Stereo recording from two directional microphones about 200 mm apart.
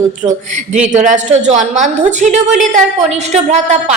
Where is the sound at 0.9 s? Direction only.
35° right (ahead or behind).